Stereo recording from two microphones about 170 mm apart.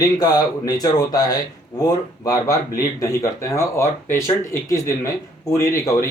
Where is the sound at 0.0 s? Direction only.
20° left (ahead or behind).